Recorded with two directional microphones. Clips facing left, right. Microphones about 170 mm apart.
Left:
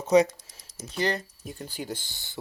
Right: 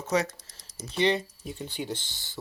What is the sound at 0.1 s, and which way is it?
Speech, 15° left (ahead or behind).